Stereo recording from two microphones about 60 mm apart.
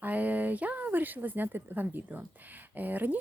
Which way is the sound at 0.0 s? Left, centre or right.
Right.